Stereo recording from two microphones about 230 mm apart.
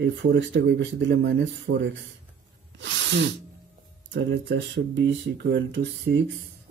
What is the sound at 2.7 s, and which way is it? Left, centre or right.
Sneeze, right.